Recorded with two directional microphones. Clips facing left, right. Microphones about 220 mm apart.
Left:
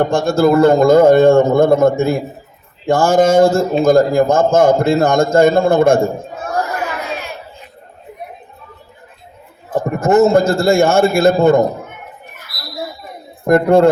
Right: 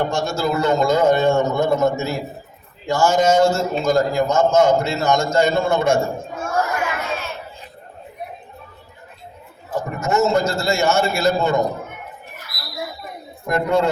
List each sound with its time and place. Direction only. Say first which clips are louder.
0.0 s a man's voice: left 8 dB; 55° left (ahead or behind)
6.4 s crowd: left 1 dB; 35° left (ahead or behind)
9.6 s a man's voice: left 8 dB; 55° left (ahead or behind)
13.4 s a man's voice: left 9 dB; 50° left (ahead or behind)